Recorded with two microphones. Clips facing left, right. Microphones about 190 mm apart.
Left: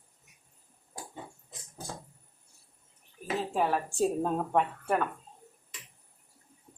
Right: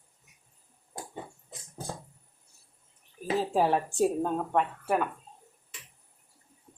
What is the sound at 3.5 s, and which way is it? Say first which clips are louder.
Speech: right 3 dB; 30° right (ahead or behind).